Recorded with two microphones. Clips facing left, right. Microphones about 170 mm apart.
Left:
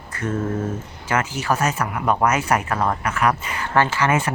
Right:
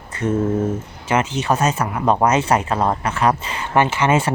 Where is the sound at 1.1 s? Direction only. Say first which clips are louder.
Right 3 dB; 20° right (ahead or behind).